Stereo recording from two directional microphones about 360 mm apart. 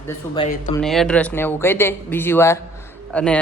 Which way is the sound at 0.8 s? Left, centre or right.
Centre.